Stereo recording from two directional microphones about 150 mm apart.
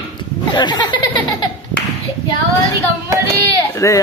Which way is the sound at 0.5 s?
30° left (ahead or behind).